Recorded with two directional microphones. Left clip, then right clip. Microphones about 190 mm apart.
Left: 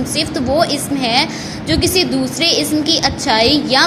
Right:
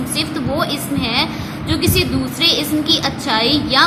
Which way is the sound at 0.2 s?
20° left (ahead or behind).